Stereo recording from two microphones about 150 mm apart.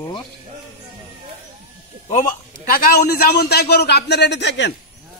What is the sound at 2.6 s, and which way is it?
A man's voice, 70° left (ahead or behind).